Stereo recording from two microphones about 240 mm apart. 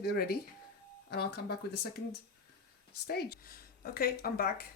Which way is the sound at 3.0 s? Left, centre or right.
Left.